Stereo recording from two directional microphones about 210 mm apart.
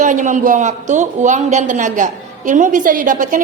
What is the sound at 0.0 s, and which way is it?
A woman's voice, 35° right (ahead or behind).